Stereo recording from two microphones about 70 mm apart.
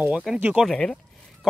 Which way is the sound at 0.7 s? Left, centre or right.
Centre.